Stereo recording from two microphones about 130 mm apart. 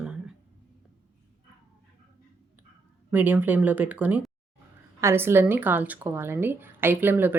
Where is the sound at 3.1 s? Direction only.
15° right (ahead or behind).